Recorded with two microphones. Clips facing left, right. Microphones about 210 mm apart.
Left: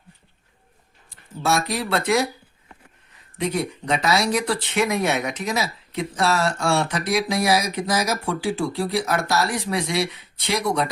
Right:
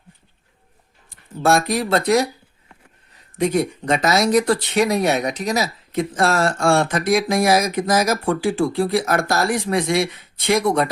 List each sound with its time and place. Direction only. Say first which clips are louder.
1.4 s speech: right 5 dB; 50° right (ahead or behind)
3.3 s speech: right 5 dB; 45° right (ahead or behind)